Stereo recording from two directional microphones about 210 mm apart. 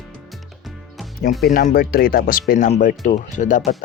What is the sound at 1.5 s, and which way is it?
Speech, 45° left (ahead or behind).